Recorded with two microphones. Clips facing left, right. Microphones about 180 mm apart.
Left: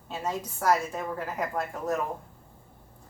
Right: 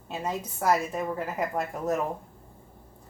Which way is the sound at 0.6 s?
20° right (ahead or behind).